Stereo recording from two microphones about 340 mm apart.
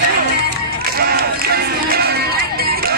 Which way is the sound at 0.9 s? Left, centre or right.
Right.